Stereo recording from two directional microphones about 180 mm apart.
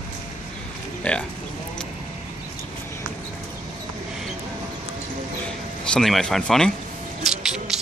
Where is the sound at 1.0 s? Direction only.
5° left (ahead or behind).